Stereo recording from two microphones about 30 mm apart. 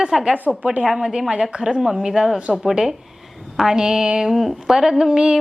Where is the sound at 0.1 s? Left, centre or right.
Centre; by 1.8 s right.